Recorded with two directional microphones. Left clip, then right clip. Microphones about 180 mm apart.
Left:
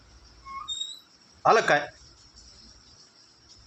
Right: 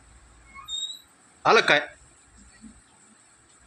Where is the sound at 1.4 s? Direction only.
10° right (ahead or behind).